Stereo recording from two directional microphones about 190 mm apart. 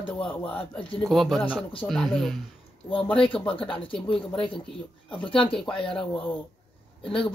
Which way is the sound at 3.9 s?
30° left (ahead or behind).